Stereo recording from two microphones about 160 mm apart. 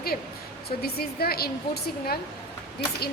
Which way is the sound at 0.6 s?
80° left.